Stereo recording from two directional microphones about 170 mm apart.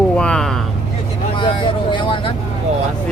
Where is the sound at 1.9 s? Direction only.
30° left (ahead or behind).